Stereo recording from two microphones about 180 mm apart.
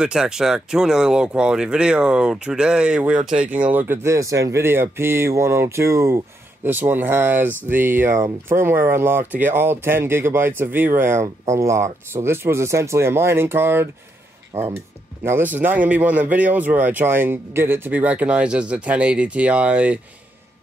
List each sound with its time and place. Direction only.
0.0 s speech: 5° right (ahead or behind)
3.2 s speech: 45° right (ahead or behind)
3.5 s speech: 10° right (ahead or behind)
15.2 s speech: 10° right (ahead or behind)